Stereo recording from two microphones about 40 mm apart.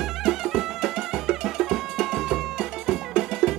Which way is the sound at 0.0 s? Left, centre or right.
Centre.